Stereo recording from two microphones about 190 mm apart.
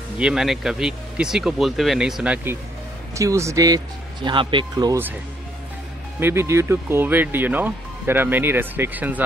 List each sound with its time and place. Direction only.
0.2 s speech: 5° right (ahead or behind); by 5.0 s 20° right (ahead or behind)
6.1 s speech: 10° right (ahead or behind)